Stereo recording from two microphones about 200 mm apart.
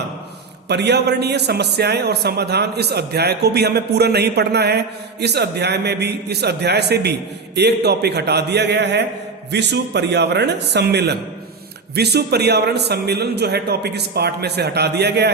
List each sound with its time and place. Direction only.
0.7 s a man's voice: 55° right (ahead or behind)